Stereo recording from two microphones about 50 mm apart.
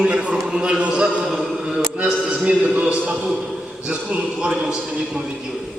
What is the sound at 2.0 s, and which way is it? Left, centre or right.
A man's voice, centre.